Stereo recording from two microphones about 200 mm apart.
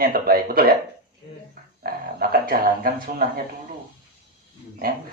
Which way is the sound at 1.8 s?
50° right (ahead or behind).